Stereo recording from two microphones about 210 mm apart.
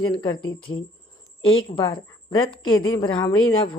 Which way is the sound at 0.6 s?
80° left.